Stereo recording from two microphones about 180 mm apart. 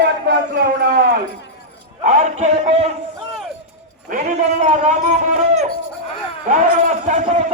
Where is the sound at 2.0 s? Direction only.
45° right (ahead or behind).